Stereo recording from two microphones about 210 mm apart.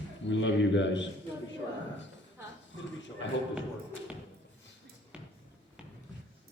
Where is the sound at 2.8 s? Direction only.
60° left (ahead or behind).